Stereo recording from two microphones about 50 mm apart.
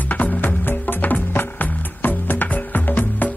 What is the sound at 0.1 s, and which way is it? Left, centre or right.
Music, left.